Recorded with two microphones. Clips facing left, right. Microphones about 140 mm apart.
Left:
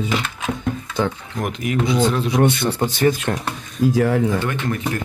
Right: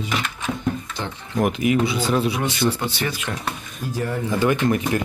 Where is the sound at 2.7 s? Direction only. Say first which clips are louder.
Left 8 dB; 45° left (ahead or behind).